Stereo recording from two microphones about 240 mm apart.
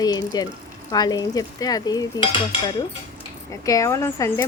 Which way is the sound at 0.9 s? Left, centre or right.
Centre.